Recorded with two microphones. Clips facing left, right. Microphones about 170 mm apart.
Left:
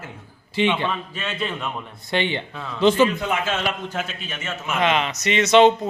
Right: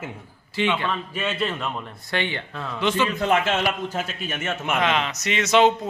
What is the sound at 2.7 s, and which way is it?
Speech, 30° left (ahead or behind).